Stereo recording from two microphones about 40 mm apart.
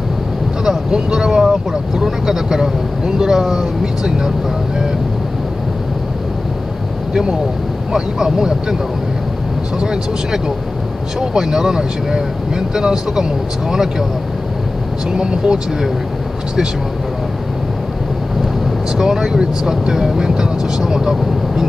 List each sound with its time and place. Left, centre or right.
0.7 s speech: centre
7.9 s speech: centre
9.8 s speech: centre
15.1 s speech: centre
18.9 s speech: centre